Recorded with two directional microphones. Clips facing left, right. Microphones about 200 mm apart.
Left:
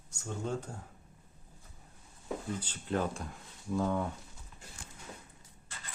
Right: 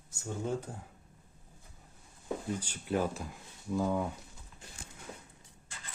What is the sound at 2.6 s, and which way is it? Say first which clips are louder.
Speech: right 1 dB; 10° right (ahead or behind).